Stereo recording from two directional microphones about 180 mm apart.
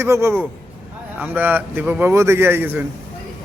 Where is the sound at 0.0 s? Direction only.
15° right (ahead or behind).